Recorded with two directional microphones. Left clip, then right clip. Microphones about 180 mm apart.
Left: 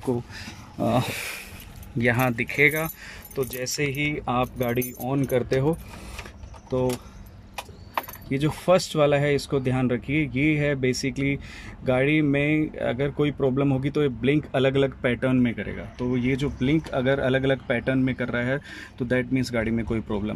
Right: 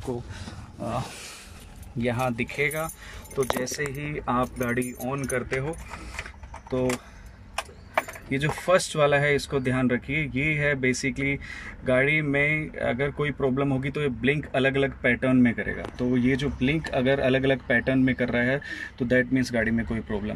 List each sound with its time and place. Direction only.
0.1 s speech: 15° left (ahead or behind)
2.0 s speech: centre (ahead or behind); by 5.8 s 20° left (ahead or behind)
8.3 s speech: 5° left (ahead or behind)